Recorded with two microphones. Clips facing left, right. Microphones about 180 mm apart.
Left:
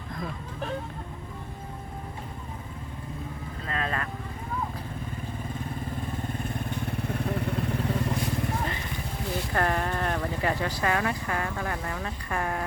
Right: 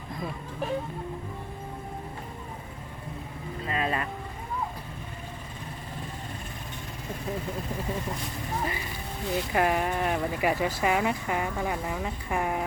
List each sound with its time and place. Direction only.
0.1 s vehicle: 5° right (ahead or behind)
3.7 s vehicle: 10° right (ahead or behind)
6.9 s motorcycle: 65° left (ahead or behind)
9.5 s speech: 10° right (ahead or behind)